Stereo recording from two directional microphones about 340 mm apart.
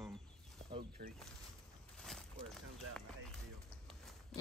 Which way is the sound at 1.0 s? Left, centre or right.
Right.